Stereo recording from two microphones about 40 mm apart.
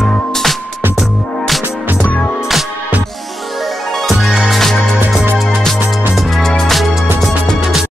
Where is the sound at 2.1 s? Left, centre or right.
Left.